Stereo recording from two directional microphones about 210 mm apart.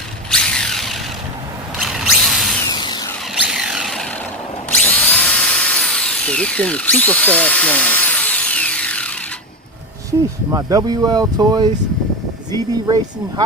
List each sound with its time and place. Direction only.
0.3 s a sound: 5° left (ahead or behind)
2.6 s a sound: 20° left (ahead or behind)
3.4 s vehicle: 5° right (ahead or behind)
4.7 s drill: 5° left (ahead or behind)
10.1 s speech: 15° right (ahead or behind)
12.7 s speech: 20° right (ahead or behind)